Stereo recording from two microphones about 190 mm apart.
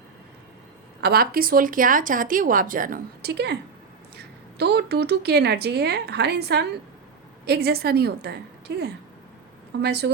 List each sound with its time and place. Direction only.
1.0 s speech: 55° right (ahead or behind)